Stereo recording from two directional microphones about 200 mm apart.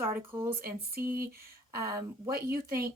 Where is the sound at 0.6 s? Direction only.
50° right (ahead or behind).